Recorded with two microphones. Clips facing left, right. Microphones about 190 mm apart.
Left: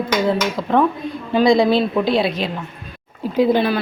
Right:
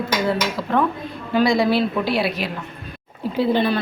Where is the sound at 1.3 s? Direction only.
20° left (ahead or behind).